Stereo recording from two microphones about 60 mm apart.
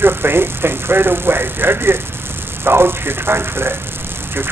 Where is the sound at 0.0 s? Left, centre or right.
Right.